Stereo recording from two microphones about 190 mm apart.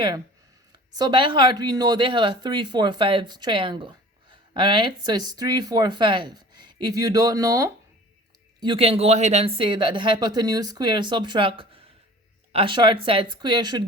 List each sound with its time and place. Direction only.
0.9 s speech: 25° right (ahead or behind)
8.6 s speech: 30° right (ahead or behind)